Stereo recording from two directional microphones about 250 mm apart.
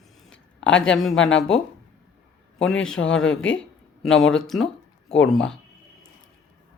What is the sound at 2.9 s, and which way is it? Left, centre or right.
Speech, left.